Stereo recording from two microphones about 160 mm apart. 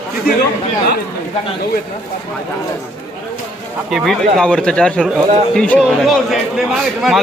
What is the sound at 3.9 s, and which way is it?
Speech, centre (ahead or behind).